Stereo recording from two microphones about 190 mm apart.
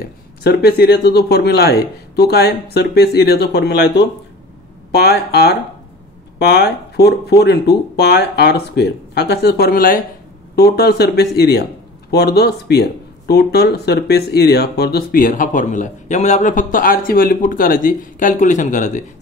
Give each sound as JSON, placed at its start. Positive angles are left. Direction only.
{"t": 0.4, "sound": "speech", "side_deg": 60}